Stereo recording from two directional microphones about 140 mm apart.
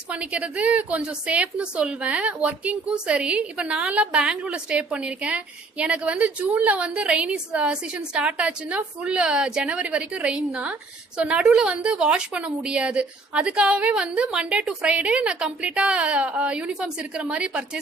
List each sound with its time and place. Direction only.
0.1 s a woman's voice: 5° right (ahead or behind)